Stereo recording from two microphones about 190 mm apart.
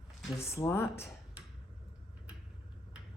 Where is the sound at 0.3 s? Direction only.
15° left (ahead or behind).